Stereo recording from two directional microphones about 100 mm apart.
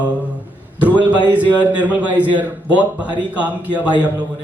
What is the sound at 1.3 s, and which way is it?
A man's voice, 15° right (ahead or behind).